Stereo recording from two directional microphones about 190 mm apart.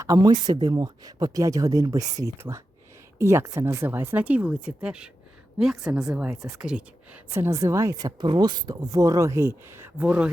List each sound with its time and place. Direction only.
0.0 s a woman's voice: 20° right (ahead or behind)